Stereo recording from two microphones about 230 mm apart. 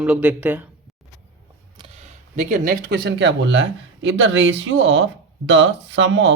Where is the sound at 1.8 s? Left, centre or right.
Right.